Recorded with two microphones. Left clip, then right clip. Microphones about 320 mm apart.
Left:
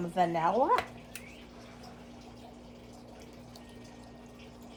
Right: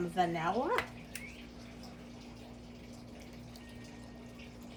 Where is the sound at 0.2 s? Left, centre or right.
Left.